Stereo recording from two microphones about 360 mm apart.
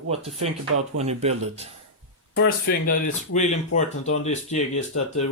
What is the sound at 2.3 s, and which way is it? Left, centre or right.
Speech, left.